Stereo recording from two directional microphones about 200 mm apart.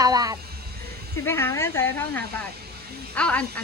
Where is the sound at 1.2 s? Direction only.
10° left (ahead or behind).